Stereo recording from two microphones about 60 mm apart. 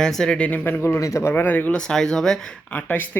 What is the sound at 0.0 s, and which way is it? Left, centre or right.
Speech, centre.